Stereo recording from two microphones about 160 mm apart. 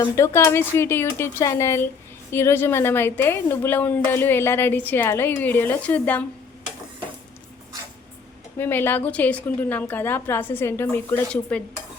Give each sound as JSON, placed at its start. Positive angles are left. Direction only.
{"t": 0.2, "sound": "a woman's voice", "side_deg": 15}
{"t": 8.5, "sound": "a woman's voice", "side_deg": 15}